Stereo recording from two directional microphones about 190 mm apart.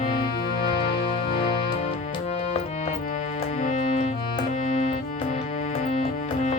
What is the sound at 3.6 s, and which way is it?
Music, 40° left (ahead or behind).